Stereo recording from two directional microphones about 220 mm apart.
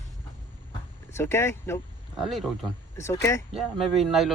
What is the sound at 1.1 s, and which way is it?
Speech, 10° left (ahead or behind).